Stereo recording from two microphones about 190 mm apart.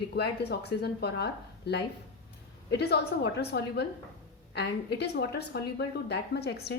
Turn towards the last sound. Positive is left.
turn(degrees=60)  # may be behind; listen again after turning